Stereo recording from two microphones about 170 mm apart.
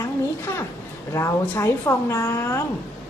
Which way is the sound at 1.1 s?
15° left (ahead or behind).